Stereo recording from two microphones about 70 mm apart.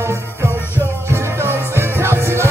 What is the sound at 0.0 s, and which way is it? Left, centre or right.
Music, right.